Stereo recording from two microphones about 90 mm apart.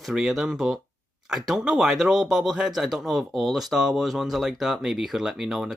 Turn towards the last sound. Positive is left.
turn(degrees=-5)  # may be behind; listen again after turning